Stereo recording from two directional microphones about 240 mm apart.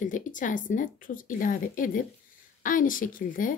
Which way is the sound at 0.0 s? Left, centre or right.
Left.